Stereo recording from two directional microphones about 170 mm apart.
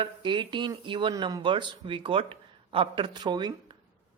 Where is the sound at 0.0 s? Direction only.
30° right (ahead or behind).